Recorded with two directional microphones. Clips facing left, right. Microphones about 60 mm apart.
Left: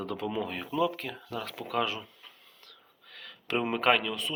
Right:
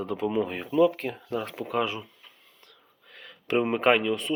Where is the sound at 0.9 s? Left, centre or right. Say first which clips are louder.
Right 6 dB; right.